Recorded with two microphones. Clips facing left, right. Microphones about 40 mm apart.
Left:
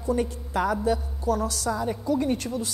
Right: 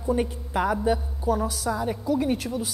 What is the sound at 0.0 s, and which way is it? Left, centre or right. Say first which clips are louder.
A woman's voice: right 1 dB; centre.